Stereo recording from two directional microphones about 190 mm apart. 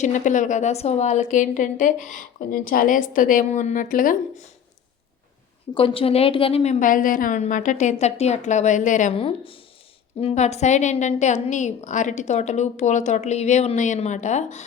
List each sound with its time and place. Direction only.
0.0 s a woman's voice: 40° left (ahead or behind)
5.7 s a woman's voice: 30° left (ahead or behind)